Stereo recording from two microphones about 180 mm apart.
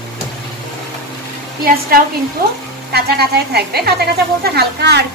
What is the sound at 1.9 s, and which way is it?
A woman's voice, 55° right (ahead or behind).